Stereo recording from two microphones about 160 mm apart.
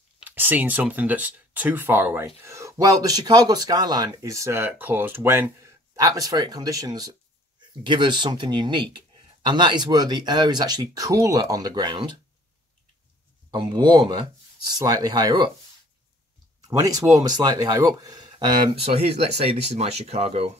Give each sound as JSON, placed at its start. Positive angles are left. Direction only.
{"t": 0.2, "sound": "speech", "side_deg": -10}
{"t": 13.5, "sound": "speech", "side_deg": -25}
{"t": 16.6, "sound": "speech", "side_deg": -20}
{"t": 18.9, "sound": "speech", "side_deg": -40}